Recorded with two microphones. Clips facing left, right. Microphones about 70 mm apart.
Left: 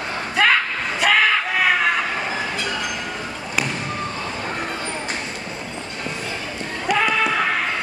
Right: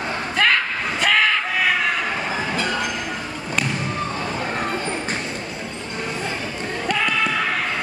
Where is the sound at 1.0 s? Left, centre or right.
Centre.